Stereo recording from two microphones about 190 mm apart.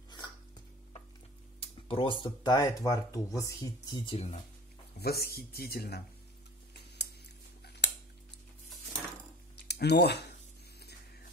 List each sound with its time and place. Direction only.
1.6 s speech: 30° left (ahead or behind)
5.0 s speech: 55° left (ahead or behind)
7.0 s a sound: 60° left (ahead or behind)
7.6 s scissors: 60° left (ahead or behind)
9.7 s speech: 60° left (ahead or behind)